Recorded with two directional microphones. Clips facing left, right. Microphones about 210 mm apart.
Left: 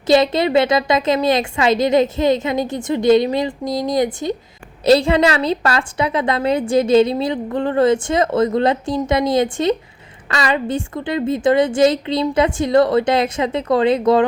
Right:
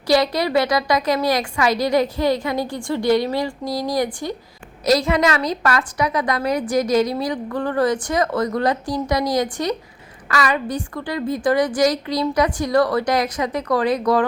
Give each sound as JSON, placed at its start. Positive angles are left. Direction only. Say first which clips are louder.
{"t": 0.1, "sound": "a woman's voice", "louder": "left 4 dB", "side_deg": 25}